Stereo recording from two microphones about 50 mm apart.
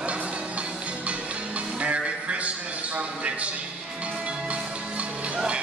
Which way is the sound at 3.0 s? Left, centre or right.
Right.